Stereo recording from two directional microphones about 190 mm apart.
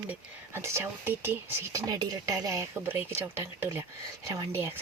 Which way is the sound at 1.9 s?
20° right (ahead or behind).